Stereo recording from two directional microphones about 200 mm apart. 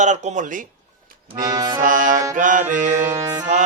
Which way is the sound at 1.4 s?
20° right (ahead or behind).